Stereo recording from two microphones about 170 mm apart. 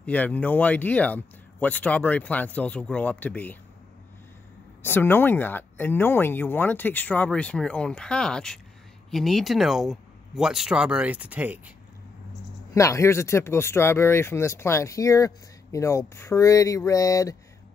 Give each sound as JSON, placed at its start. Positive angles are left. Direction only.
{"t": 0.0, "sound": "speech", "side_deg": 10}
{"t": 4.8, "sound": "speech", "side_deg": 10}
{"t": 12.7, "sound": "speech", "side_deg": 20}